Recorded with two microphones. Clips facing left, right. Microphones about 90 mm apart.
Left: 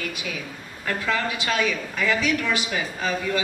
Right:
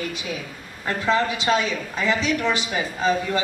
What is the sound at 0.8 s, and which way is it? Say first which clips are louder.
A woman's voice: right 4 dB; 25° right (ahead or behind).